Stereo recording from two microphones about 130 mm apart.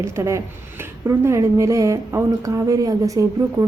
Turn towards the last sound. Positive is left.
turn(degrees=-25)  # may be behind; listen again after turning